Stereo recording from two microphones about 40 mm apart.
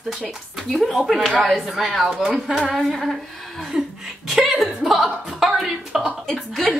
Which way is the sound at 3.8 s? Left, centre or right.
Right.